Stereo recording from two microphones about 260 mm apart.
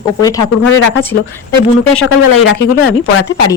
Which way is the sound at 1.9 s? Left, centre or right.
Left.